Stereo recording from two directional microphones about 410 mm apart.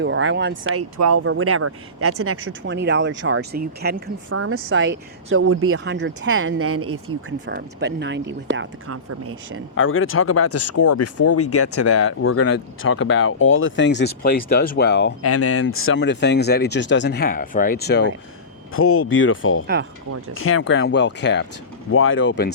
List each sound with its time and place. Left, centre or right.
0.0 s speech: right
9.7 s speech: left
15.2 s speech: left